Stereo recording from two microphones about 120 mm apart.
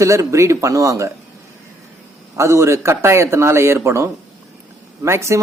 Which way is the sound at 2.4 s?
25° right (ahead or behind).